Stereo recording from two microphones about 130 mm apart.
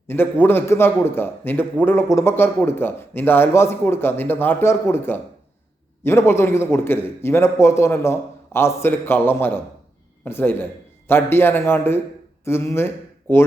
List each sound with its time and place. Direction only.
0.1 s a man's voice: 15° left (ahead or behind)